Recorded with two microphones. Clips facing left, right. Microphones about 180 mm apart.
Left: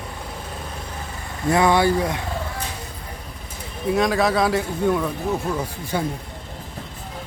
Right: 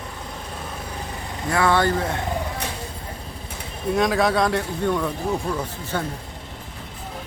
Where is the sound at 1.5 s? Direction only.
15° left (ahead or behind).